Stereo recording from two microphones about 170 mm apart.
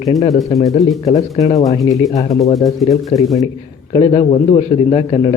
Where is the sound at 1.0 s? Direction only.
20° left (ahead or behind).